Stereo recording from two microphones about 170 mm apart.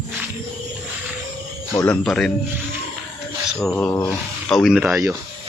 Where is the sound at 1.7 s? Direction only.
10° left (ahead or behind).